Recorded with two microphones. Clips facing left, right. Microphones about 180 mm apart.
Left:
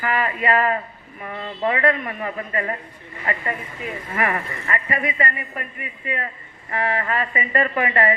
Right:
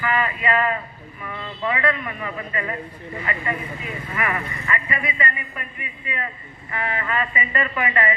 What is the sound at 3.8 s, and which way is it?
A woman's voice, 40° left (ahead or behind).